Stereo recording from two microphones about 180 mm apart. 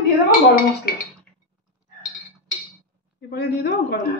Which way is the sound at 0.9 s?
55° left (ahead or behind).